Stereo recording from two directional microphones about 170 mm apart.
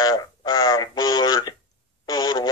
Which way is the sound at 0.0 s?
25° left (ahead or behind).